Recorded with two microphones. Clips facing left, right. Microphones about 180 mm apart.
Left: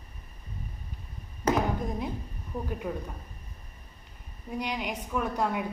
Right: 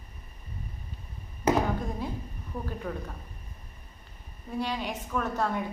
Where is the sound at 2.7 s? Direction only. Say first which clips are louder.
Left 2 dB; 10° left (ahead or behind).